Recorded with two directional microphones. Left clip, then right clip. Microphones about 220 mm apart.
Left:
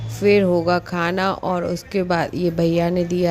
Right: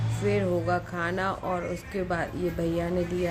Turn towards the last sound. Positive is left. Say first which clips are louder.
# left 8 dB
turn(degrees=40)  # may be behind; listen again after turning